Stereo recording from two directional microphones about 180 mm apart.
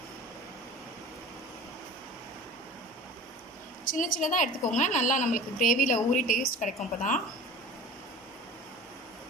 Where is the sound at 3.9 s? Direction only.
50° left (ahead or behind).